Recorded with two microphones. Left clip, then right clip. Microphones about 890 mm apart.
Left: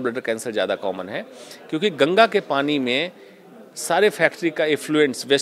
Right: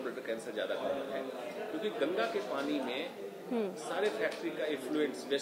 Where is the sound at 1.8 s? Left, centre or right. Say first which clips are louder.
Left 18 dB; left.